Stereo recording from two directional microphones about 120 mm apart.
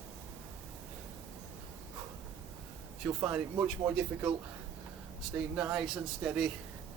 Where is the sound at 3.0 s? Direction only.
10° right (ahead or behind).